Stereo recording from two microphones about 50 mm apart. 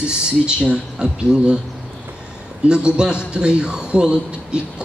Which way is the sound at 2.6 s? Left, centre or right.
Right.